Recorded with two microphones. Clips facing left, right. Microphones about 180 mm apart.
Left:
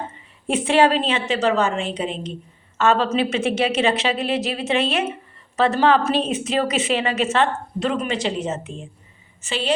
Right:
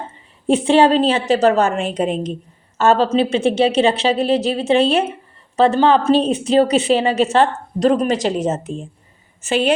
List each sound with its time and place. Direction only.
0.4 s a woman's voice: 30° right (ahead or behind); by 2.3 s 45° right (ahead or behind)
2.7 s a woman's voice: 35° right (ahead or behind)
6.1 s a woman's voice: 35° right (ahead or behind); by 9.7 s 50° right (ahead or behind)